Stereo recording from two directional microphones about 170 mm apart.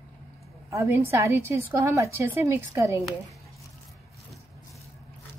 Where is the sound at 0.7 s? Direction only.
15° right (ahead or behind).